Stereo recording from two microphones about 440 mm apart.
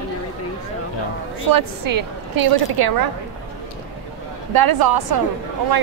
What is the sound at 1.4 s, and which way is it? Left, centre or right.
A woman's voice, right.